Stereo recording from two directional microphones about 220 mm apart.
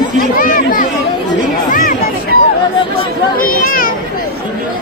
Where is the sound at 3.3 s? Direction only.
40° left (ahead or behind).